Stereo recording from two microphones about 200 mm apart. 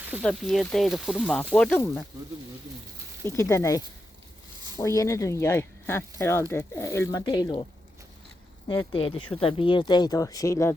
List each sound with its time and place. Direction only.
0.1 s speech: centre (ahead or behind)
1.8 s speech: 15° left (ahead or behind)
3.2 s speech: 15° left (ahead or behind)